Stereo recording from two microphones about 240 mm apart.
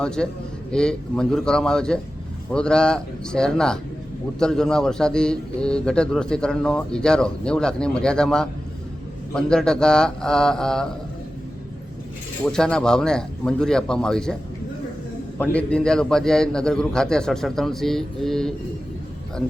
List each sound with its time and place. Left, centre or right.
0.0 s a man's voice: centre
12.5 s a man's voice: centre
15.4 s a man's voice: centre